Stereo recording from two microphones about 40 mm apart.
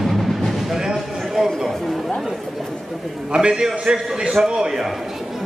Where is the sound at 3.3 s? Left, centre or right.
Right.